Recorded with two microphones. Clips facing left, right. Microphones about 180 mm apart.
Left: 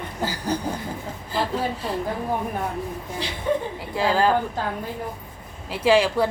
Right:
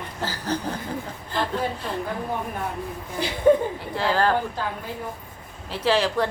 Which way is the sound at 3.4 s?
50° right (ahead or behind).